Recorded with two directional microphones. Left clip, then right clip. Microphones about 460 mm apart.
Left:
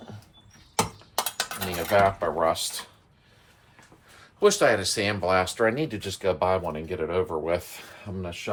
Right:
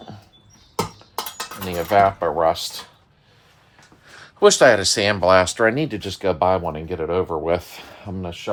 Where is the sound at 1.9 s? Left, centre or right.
Centre.